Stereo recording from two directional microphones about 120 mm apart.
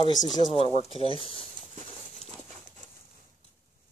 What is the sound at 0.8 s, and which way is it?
Speech, 55° left (ahead or behind).